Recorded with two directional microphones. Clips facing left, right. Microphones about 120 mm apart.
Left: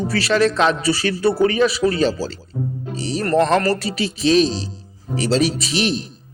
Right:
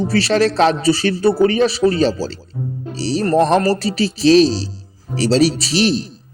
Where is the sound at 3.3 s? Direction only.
20° right (ahead or behind).